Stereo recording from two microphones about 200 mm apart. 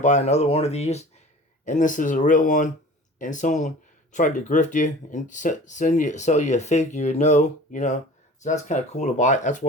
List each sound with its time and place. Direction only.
0.0 s speech: 35° left (ahead or behind)